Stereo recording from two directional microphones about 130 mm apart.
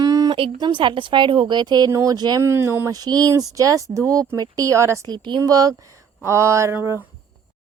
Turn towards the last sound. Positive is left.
turn(degrees=-20)  # may be behind; listen again after turning